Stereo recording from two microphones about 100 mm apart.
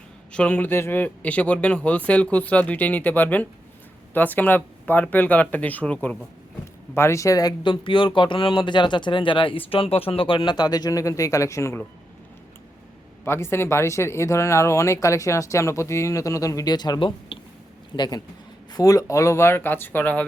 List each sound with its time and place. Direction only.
0.3 s speech: 15° left (ahead or behind)
6.9 s speech: 25° left (ahead or behind)
7.6 s speech: 55° left (ahead or behind); by 11.8 s 30° left (ahead or behind)
13.2 s speech: 25° left (ahead or behind); by 18.2 s 45° left (ahead or behind)
18.7 s speech: 35° left (ahead or behind); by 20.2 s 20° left (ahead or behind)